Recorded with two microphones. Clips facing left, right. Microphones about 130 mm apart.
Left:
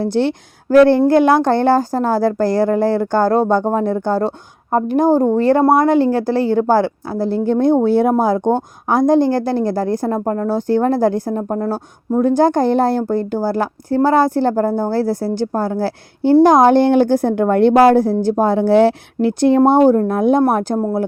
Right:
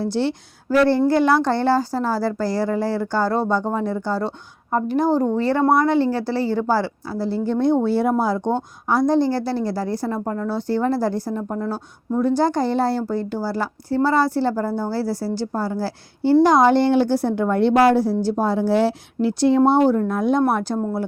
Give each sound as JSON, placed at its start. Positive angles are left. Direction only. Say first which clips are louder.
{"t": 0.0, "sound": "a woman's voice", "louder": "left 5 dB", "side_deg": 55}